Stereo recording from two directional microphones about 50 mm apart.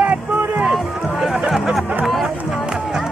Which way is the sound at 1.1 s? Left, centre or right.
Centre.